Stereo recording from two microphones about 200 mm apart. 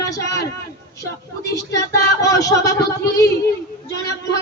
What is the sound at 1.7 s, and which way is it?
Speech, 15° left (ahead or behind).